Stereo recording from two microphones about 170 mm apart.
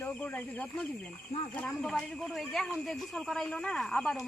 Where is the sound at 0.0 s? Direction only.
10° left (ahead or behind).